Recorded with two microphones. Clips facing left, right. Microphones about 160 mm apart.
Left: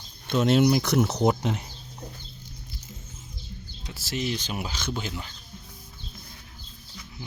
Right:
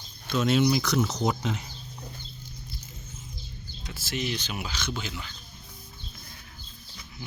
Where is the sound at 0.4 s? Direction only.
55° left (ahead or behind).